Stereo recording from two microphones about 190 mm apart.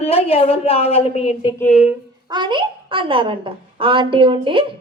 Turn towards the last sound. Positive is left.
turn(degrees=-25)  # may be behind; listen again after turning